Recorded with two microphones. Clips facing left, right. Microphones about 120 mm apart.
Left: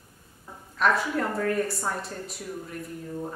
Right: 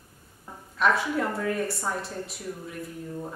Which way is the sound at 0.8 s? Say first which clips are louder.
Even; centre (ahead or behind).